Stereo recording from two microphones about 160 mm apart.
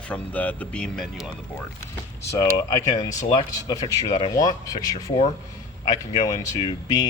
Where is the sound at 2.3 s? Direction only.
25° left (ahead or behind).